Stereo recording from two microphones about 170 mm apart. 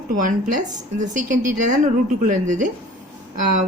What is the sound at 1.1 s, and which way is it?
A woman's voice, 50° right (ahead or behind).